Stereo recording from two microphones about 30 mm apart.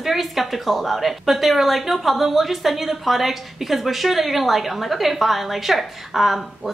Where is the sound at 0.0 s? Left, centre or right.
Centre.